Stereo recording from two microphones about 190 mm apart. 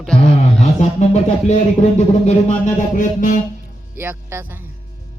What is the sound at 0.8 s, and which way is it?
Speech, 35° left (ahead or behind).